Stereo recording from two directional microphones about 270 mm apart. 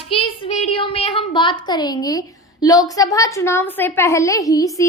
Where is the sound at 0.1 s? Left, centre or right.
Left.